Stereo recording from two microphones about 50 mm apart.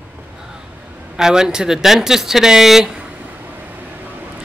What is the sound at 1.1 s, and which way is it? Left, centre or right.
Speech, centre.